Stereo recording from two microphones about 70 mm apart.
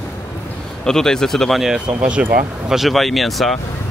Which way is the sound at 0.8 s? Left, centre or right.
Centre.